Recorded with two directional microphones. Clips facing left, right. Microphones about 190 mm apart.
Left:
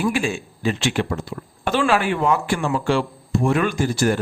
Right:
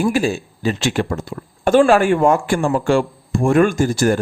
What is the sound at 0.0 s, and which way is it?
Speech, 40° right (ahead or behind).